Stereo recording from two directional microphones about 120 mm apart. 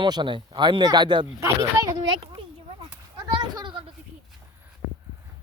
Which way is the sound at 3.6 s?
45° right (ahead or behind).